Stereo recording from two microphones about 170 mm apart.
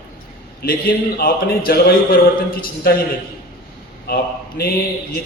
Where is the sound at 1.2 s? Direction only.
60° left (ahead or behind).